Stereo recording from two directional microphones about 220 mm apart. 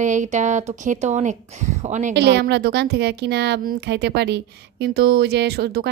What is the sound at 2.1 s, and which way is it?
A woman's voice, 50° right (ahead or behind).